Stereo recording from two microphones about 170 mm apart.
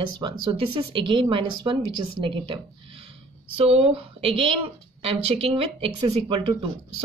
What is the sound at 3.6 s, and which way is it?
Speech, 35° right (ahead or behind).